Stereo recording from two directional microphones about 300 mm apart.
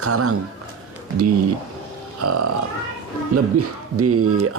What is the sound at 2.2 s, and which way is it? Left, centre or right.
Speech, right.